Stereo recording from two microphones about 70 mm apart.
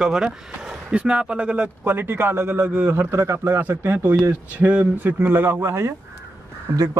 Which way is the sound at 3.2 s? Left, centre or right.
Right.